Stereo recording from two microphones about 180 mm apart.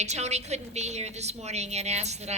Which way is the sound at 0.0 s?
40° right (ahead or behind).